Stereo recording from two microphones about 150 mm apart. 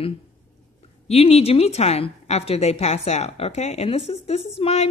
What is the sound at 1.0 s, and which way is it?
Speech, 45° left (ahead or behind).